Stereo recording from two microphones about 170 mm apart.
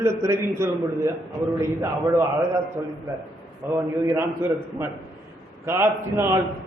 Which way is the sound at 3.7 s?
15° right (ahead or behind).